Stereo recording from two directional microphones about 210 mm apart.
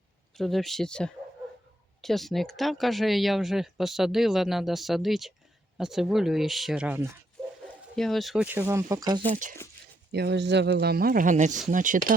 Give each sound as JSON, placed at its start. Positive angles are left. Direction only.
{"t": 0.3, "sound": "speech", "side_deg": 0}
{"t": 9.3, "sound": "speech", "side_deg": -35}
{"t": 10.1, "sound": "speech", "side_deg": -50}